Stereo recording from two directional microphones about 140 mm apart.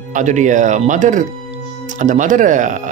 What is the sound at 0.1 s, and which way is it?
Speech, 60° right (ahead or behind).